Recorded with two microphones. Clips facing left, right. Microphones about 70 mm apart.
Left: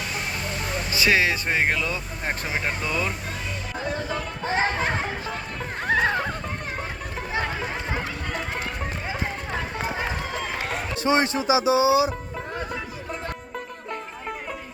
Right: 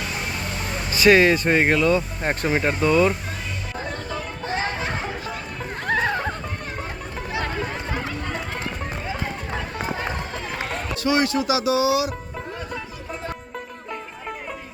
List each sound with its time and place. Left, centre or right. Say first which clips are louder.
0.9 s speech: right 7 dB; centre
3.8 s music: left 4 dB; centre
5.8 s music: left 1 dB; centre
7.4 s a sound: right 1 dB; centre
8.8 s run: right 1 dB; centre
10.9 s speech: right 1 dB; left